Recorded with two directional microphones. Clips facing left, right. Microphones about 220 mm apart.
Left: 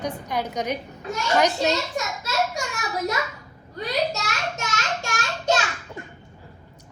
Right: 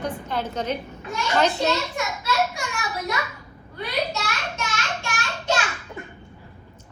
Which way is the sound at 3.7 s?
45° left (ahead or behind).